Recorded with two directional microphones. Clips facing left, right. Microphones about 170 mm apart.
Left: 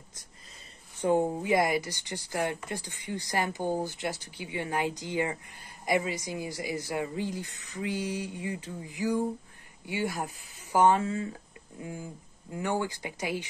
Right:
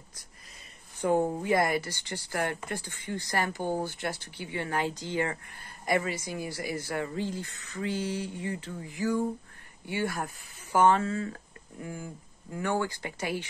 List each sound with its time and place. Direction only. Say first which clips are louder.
1.0 s speech: even; 15° left (ahead or behind)